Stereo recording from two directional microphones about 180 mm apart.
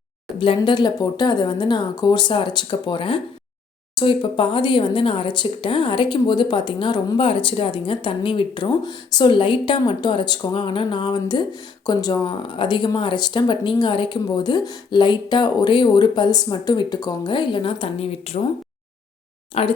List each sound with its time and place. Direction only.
0.3 s speech: 30° left (ahead or behind)
19.5 s speech: 35° left (ahead or behind)